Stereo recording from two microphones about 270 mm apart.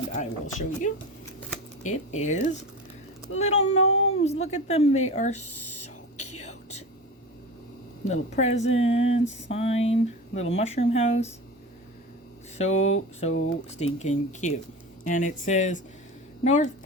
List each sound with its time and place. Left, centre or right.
0.1 s speech: left
3.8 s speech: left
4.2 s speech: left
6.1 s whispering: left
6.4 s whispering: left
8.0 s speech: left
12.5 s speech: left